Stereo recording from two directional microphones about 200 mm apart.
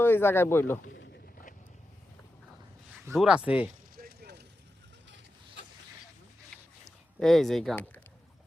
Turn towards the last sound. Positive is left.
turn(degrees=5)  # may be behind; listen again after turning